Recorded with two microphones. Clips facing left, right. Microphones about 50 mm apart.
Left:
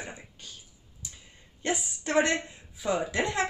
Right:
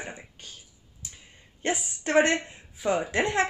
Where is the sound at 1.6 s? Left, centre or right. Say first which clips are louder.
Right 2 dB; right.